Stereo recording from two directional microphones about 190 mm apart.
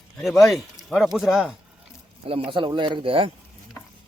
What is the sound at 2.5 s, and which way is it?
Speech, 25° right (ahead or behind).